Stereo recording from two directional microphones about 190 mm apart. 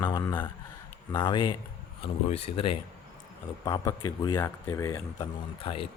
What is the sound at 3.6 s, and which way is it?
Speech, 20° left (ahead or behind).